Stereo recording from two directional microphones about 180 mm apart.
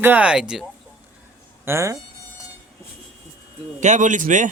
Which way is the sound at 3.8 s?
45° right (ahead or behind).